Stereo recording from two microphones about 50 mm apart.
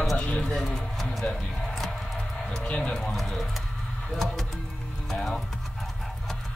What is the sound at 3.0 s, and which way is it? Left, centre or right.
Pigeon, centre.